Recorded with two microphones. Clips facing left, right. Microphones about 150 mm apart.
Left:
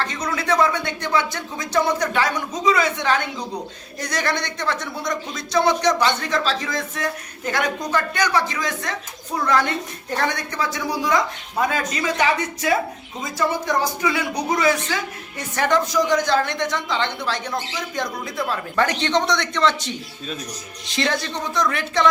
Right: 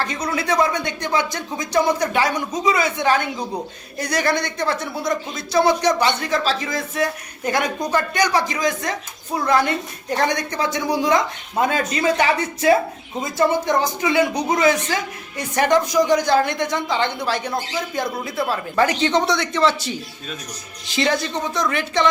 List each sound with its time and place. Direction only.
0.0 s speech: 10° right (ahead or behind)
10.2 s a woman's voice: 20° right (ahead or behind); by 22.1 s centre (ahead or behind)